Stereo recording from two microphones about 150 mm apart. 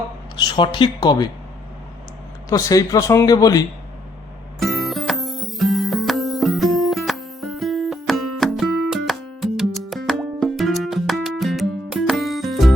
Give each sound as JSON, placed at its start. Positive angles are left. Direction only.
{"t": 0.3, "sound": "speech", "side_deg": 30}
{"t": 2.5, "sound": "speech", "side_deg": 25}
{"t": 4.6, "sound": "music", "side_deg": 0}